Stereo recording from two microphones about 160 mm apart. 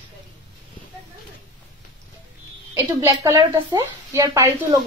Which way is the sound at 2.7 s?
15° right (ahead or behind).